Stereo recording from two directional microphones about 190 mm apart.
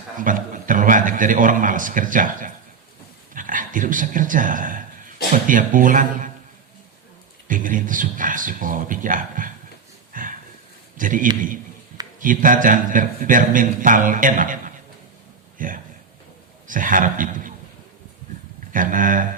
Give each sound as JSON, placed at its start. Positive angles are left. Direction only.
{"t": 0.2, "sound": "a man's voice", "side_deg": -45}
{"t": 7.4, "sound": "speech", "side_deg": -45}
{"t": 10.1, "sound": "a sound", "side_deg": -45}
{"t": 10.9, "sound": "a man's voice", "side_deg": -45}
{"t": 18.7, "sound": "speech", "side_deg": -45}